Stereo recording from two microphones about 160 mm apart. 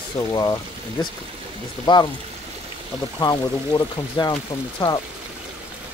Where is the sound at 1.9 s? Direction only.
30° left (ahead or behind).